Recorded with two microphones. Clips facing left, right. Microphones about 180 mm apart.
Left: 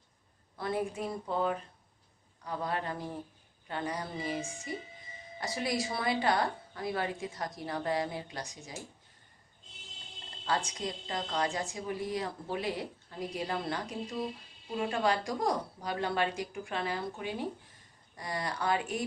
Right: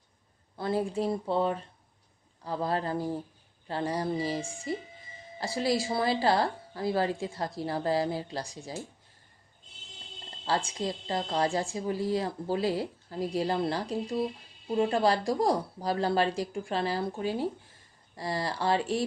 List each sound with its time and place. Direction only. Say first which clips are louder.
0.5 s a woman's voice: right 4 dB; 30° right (ahead or behind)
10.4 s a woman's voice: right 3 dB; 30° right (ahead or behind)